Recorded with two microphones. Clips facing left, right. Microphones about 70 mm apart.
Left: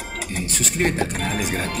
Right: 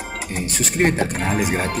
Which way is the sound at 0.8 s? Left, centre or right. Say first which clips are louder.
Right 3 dB; right.